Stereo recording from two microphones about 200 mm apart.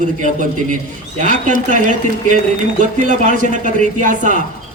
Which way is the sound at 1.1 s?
40° right (ahead or behind).